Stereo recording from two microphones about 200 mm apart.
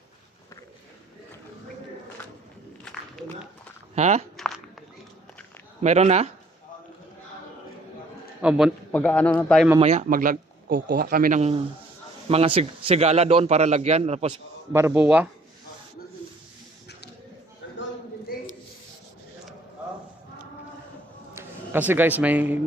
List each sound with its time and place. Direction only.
2.8 s walk: 5° left (ahead or behind)
3.9 s a man's voice: 35° right (ahead or behind)
4.4 s walk: centre (ahead or behind)
5.8 s a man's voice: 35° right (ahead or behind)
8.4 s a man's voice: 5° right (ahead or behind)
9.7 s a man's voice: 30° right (ahead or behind)
10.1 s speech: 45° right (ahead or behind)
10.8 s a man's voice: 55° right (ahead or behind); by 14.3 s 30° right (ahead or behind)
14.7 s speech: 10° right (ahead or behind)
18.3 s snake: 50° left (ahead or behind)
21.3 s a man's voice: 10° right (ahead or behind)